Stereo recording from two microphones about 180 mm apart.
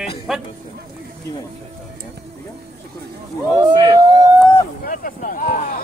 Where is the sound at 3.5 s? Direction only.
20° right (ahead or behind).